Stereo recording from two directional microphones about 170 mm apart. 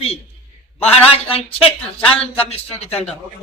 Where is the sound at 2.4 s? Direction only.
35° left (ahead or behind).